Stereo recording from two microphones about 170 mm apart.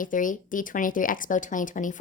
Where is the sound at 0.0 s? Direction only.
50° left (ahead or behind).